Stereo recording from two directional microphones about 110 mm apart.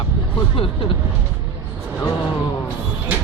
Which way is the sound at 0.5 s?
55° left (ahead or behind).